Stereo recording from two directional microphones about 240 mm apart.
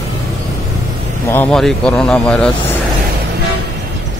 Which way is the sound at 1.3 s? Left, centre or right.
Centre.